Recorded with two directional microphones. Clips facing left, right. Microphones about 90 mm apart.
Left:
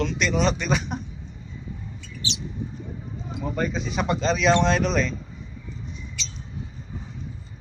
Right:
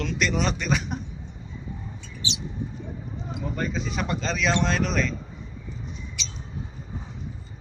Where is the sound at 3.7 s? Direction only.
5° left (ahead or behind).